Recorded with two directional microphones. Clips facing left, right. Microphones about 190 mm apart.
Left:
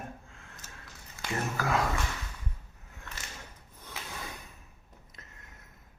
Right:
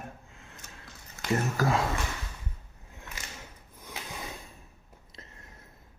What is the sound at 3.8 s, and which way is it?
Snort, 15° right (ahead or behind).